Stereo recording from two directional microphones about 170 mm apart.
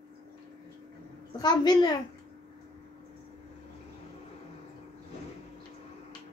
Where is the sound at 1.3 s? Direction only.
25° left (ahead or behind).